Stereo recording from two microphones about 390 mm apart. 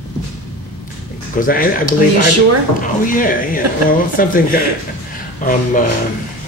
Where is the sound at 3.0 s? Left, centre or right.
Left.